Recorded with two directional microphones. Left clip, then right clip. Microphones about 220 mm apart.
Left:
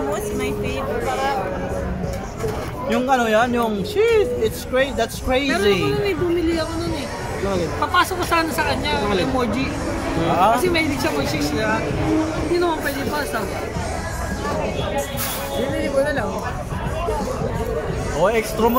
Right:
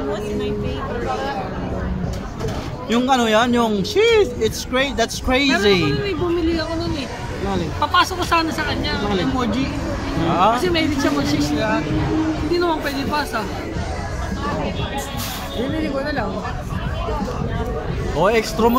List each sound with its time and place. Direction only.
2.9 s speech: 20° right (ahead or behind)
7.8 s speech: 15° right (ahead or behind)
10.4 s speech: 15° right (ahead or behind)
15.8 s speech: 15° right (ahead or behind)
18.2 s speech: 15° right (ahead or behind)